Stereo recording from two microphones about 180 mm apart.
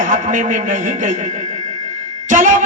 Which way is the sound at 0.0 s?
45° right (ahead or behind).